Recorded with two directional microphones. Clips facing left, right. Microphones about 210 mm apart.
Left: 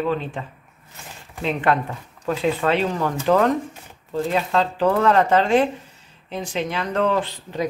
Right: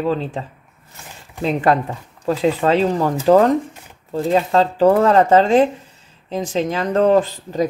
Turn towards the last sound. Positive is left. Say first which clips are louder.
# right 6 dB
turn(degrees=-40)  # may be behind; listen again after turning